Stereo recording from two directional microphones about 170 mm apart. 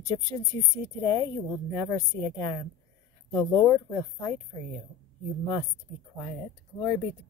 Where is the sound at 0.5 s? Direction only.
20° left (ahead or behind).